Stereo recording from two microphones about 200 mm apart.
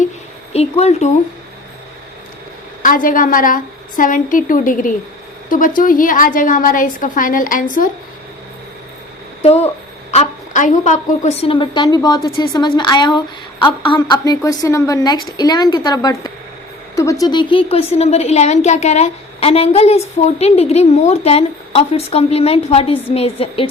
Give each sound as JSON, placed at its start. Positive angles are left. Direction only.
{"t": 0.5, "sound": "a woman's voice", "side_deg": 30}
{"t": 2.8, "sound": "a woman's voice", "side_deg": 45}
{"t": 9.4, "sound": "a woman's voice", "side_deg": 30}